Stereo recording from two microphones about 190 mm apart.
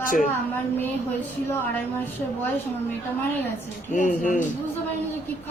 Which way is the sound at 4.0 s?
45° left (ahead or behind).